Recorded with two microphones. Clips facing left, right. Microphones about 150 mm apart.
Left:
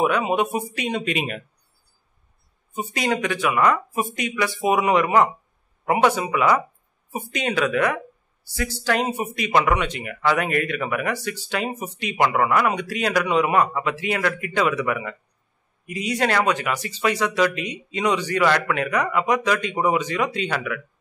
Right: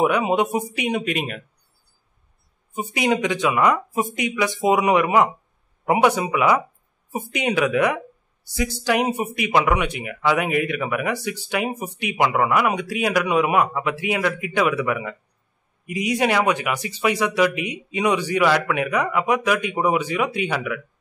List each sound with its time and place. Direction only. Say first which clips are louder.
0.0 s speech: right 2 dB; 15° right (ahead or behind)
1.1 s speech: even; centre (ahead or behind)
2.7 s speech: right 3 dB; 15° right (ahead or behind)